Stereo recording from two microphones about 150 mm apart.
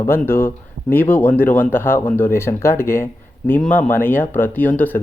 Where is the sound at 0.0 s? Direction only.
15° left (ahead or behind).